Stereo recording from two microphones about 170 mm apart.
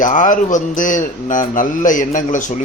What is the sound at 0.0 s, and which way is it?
Speech, 50° left (ahead or behind).